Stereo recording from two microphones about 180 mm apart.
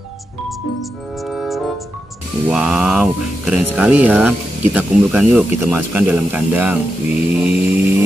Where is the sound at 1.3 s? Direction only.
Centre (ahead or behind).